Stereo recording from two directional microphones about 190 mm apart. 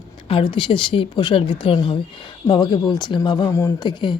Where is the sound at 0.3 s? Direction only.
25° left (ahead or behind).